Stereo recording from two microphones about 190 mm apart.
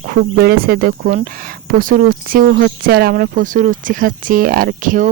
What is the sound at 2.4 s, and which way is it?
Speech, 70° right (ahead or behind).